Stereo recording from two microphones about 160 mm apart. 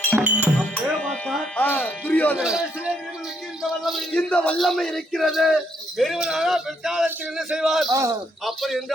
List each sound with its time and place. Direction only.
0.2 s music: 10° right (ahead or behind)
0.9 s speech: centre (ahead or behind)
2.4 s speech: 5° right (ahead or behind)
7.9 s a man's voice: 20° right (ahead or behind)
8.4 s speech: centre (ahead or behind)